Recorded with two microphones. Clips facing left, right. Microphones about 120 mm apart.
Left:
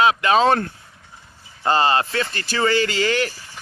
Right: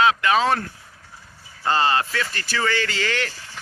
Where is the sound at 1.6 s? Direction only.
20° left (ahead or behind).